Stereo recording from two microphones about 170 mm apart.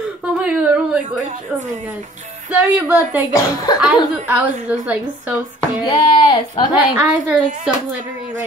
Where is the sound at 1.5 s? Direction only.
5° right (ahead or behind).